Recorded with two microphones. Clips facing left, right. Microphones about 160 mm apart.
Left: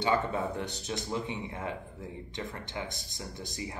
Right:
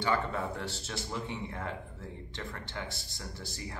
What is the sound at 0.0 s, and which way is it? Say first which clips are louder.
Speech: left 2 dB; 20° left (ahead or behind).